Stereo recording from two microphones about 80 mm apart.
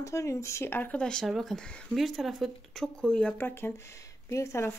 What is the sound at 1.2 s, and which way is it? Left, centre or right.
Speech, centre.